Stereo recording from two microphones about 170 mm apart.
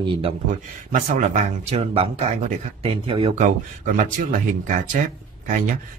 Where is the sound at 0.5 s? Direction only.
50° right (ahead or behind); by 3.4 s 35° right (ahead or behind).